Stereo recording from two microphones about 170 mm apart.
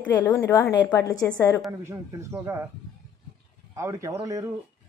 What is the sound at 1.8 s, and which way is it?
Speech, 15° right (ahead or behind).